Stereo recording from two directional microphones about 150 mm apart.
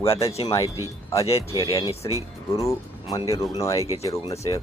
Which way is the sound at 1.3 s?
40° left (ahead or behind).